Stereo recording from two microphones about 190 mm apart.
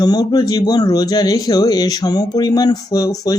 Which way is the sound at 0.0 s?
20° left (ahead or behind).